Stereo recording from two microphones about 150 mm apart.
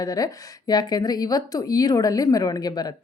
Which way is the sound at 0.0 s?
25° left (ahead or behind).